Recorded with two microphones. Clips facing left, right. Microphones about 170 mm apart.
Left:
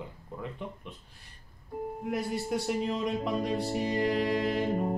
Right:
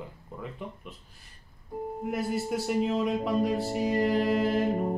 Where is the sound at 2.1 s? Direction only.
Centre (ahead or behind).